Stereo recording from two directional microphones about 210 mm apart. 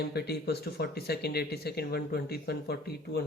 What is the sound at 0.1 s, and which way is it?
Speech, 50° left (ahead or behind).